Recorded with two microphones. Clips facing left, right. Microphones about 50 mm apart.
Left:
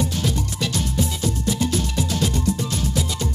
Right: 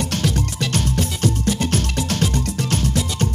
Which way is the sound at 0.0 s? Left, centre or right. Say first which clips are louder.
Right 2 dB; right.